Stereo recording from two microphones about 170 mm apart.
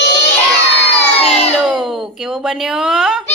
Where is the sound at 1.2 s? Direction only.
40° left (ahead or behind).